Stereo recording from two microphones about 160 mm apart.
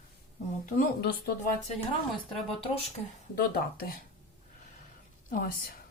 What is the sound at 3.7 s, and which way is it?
Speech, 65° left (ahead or behind).